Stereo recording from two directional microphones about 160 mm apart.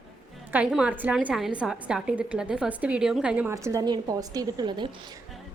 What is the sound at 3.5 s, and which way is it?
A woman's voice, 20° right (ahead or behind).